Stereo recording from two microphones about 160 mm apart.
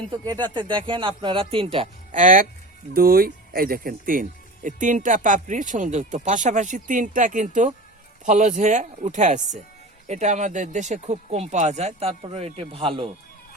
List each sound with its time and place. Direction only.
0.1 s speech: 25° right (ahead or behind)
2.1 s speech: 55° right (ahead or behind); by 13.1 s 35° right (ahead or behind)